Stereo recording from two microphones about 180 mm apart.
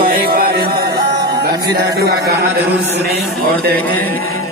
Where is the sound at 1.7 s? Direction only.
65° right (ahead or behind).